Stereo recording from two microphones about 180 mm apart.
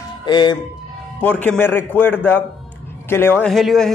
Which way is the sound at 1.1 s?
10° left (ahead or behind).